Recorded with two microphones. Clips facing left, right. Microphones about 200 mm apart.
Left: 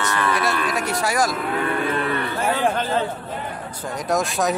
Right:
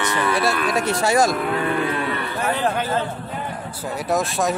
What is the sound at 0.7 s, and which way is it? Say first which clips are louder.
Speech: right 4 dB; 25° right (ahead or behind).